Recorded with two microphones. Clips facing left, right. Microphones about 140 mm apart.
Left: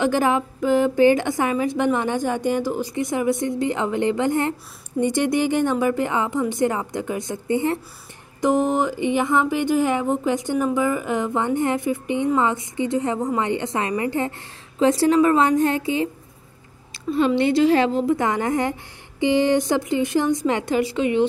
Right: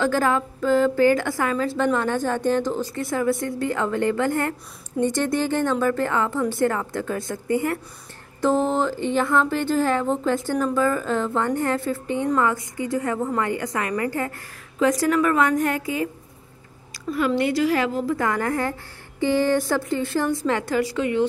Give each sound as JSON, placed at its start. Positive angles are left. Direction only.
{"t": 0.0, "sound": "a woman's voice", "side_deg": 15}
{"t": 16.9, "sound": "a sound", "side_deg": 25}
{"t": 17.4, "sound": "a woman's voice", "side_deg": 25}